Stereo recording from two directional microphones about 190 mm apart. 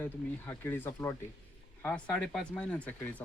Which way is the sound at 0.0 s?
10° left (ahead or behind).